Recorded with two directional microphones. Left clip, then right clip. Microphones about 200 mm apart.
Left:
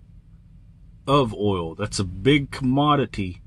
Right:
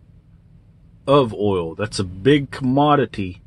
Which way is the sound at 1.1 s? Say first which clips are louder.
Right 4 dB; 20° left (ahead or behind).